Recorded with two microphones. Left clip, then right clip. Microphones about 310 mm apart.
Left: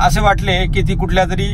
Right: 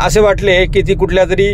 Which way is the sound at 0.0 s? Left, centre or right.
Centre.